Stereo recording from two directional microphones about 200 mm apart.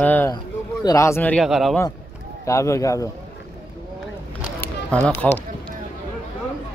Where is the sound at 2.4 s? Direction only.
15° left (ahead or behind).